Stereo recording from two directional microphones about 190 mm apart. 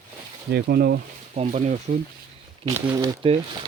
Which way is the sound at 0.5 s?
55° right (ahead or behind).